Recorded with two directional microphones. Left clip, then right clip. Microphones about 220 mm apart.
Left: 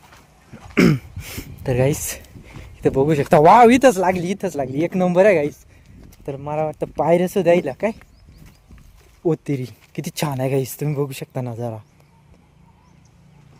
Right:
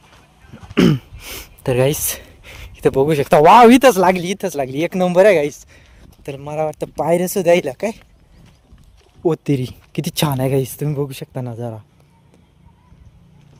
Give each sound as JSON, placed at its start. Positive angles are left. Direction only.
{"t": 0.7, "sound": "throat clearing", "side_deg": -5}
{"t": 1.2, "sound": "a sound", "side_deg": -20}
{"t": 2.4, "sound": "speech", "side_deg": -25}
{"t": 6.8, "sound": "speech", "side_deg": 0}
{"t": 7.4, "sound": "speech", "side_deg": -30}
{"t": 9.2, "sound": "speech", "side_deg": -20}